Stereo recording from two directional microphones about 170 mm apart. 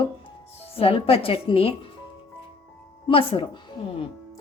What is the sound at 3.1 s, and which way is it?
Speech, 30° left (ahead or behind).